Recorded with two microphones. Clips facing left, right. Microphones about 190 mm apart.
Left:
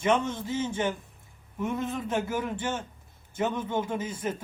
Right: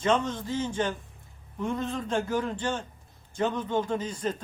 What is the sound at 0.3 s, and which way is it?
A man's voice, 10° left (ahead or behind).